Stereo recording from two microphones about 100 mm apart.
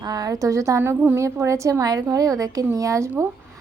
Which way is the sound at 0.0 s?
40° right (ahead or behind).